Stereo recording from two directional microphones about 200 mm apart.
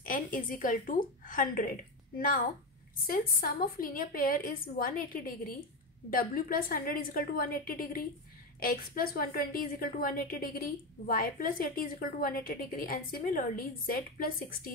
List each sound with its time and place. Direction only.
0.0 s a woman's voice: 45° left (ahead or behind)